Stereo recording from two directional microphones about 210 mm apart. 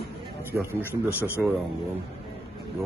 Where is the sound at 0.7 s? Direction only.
10° left (ahead or behind).